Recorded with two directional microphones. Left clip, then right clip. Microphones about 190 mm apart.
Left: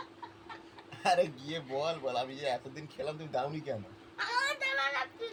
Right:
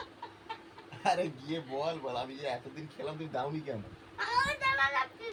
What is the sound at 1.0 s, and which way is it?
A man's voice, 55° left (ahead or behind).